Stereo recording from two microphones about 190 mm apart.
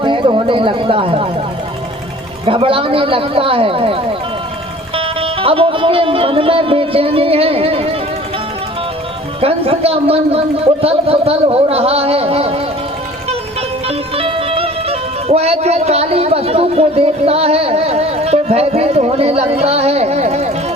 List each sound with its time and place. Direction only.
0.0 s speech: 25° right (ahead or behind)
2.5 s speech: 30° right (ahead or behind)
9.4 s speech: 30° right (ahead or behind)
13.8 s music: 30° right (ahead or behind)